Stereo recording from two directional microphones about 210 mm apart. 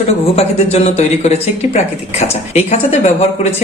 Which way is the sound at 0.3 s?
30° left (ahead or behind).